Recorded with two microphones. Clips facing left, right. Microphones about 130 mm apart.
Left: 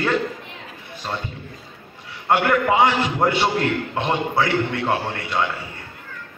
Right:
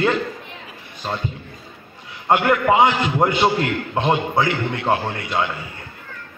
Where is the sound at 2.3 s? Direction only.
15° right (ahead or behind).